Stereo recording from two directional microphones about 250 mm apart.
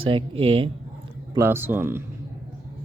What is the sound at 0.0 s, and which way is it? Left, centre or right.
Speech, right.